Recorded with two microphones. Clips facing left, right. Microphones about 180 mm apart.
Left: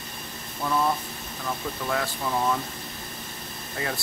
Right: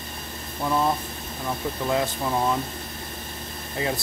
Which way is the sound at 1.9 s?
20° right (ahead or behind).